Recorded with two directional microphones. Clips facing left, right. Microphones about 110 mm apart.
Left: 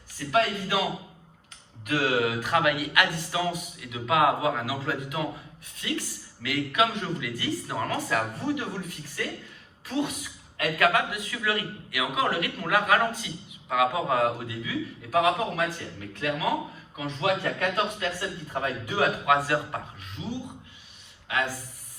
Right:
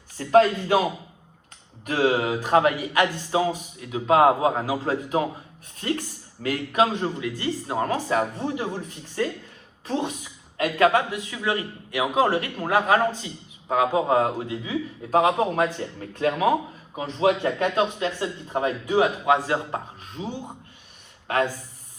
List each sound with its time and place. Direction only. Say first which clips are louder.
0.2 s speech: right 7 dB; 35° right (ahead or behind)
1.8 s a man's voice: right 3 dB; 30° right (ahead or behind)